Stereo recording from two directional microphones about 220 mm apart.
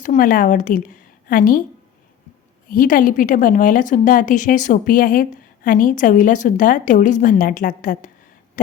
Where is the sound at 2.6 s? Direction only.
40° left (ahead or behind).